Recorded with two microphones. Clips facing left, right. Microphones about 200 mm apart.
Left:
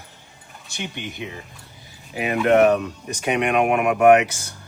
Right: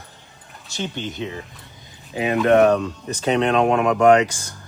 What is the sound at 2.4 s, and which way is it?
Speech, 15° left (ahead or behind).